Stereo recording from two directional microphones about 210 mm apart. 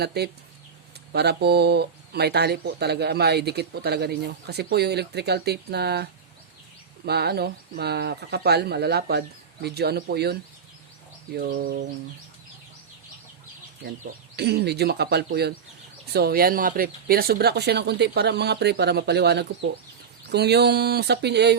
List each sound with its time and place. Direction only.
0.0 s speech: 50° right (ahead or behind)
11.3 s speech: 45° right (ahead or behind)
14.3 s speech: 50° right (ahead or behind)